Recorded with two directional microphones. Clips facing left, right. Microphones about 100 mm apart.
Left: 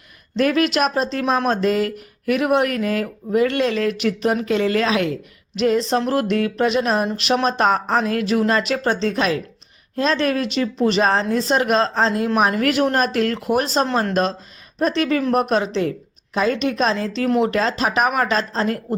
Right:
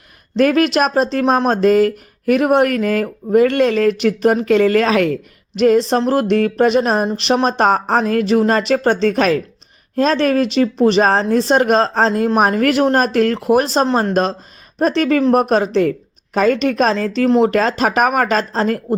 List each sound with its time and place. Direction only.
0.3 s speech: 45° right (ahead or behind)
8.9 s speech: 55° right (ahead or behind)